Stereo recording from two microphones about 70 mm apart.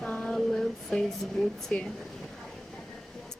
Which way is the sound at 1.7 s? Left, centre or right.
Left.